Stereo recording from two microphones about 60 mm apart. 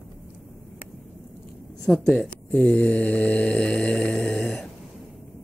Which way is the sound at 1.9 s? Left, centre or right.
Centre.